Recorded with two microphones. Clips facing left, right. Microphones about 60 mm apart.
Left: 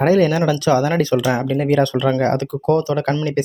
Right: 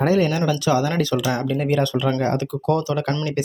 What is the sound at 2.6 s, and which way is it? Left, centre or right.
Speech, left.